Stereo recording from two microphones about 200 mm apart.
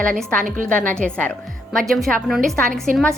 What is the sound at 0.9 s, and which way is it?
A woman's voice, 5° left (ahead or behind).